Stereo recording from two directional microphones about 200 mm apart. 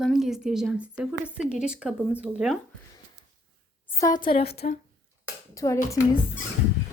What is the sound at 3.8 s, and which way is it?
Speech, 15° left (ahead or behind).